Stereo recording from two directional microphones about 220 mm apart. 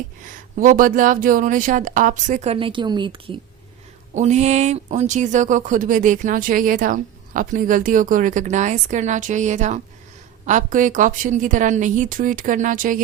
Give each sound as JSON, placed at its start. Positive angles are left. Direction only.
{"t": 0.3, "sound": "speech", "side_deg": -40}